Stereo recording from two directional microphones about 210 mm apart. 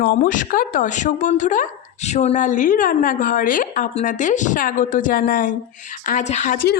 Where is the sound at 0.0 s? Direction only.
45° left (ahead or behind).